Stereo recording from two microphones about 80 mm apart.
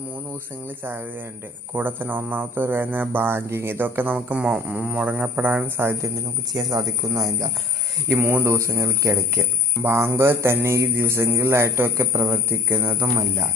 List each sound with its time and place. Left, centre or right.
1.7 s speech: right
6.5 s speech: right
8.1 s speech: right